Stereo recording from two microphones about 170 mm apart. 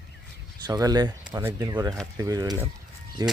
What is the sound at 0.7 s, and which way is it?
Speech, 20° right (ahead or behind).